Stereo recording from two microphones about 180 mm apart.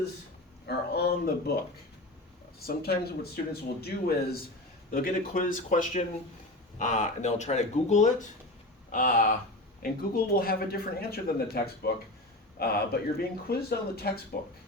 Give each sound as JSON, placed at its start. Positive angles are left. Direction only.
{"t": 0.7, "sound": "speech", "side_deg": 60}
{"t": 2.6, "sound": "speech", "side_deg": 60}